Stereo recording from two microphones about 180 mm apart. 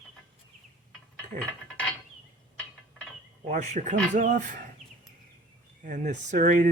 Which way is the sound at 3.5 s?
40° right (ahead or behind).